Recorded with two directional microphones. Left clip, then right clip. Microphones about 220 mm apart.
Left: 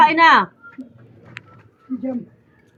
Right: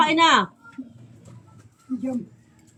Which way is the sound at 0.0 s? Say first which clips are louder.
Left 6 dB; 25° right (ahead or behind).